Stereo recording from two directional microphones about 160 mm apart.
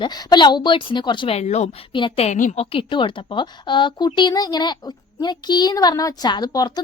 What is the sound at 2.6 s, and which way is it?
A child's voice, 30° left (ahead or behind).